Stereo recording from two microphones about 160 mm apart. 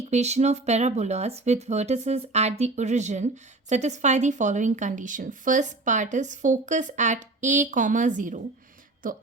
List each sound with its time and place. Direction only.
0.1 s a woman's voice: 45° right (ahead or behind)